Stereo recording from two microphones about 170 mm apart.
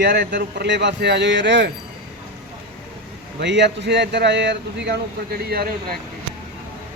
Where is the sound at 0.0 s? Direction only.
75° right (ahead or behind).